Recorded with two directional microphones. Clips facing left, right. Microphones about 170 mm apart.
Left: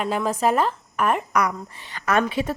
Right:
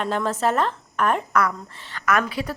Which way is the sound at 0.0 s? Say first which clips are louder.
Left 1 dB; 10° left (ahead or behind).